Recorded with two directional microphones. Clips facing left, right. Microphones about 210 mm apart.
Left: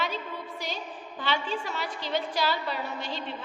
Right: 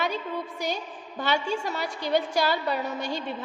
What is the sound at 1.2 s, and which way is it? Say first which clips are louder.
A woman's voice: right 4 dB; 45° right (ahead or behind).